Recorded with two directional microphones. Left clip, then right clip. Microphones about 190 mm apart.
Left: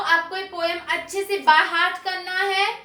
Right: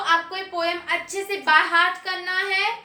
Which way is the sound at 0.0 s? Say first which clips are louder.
Left 1 dB; 20° right (ahead or behind).